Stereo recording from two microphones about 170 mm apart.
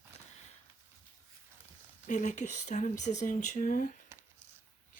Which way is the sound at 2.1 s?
45° left (ahead or behind).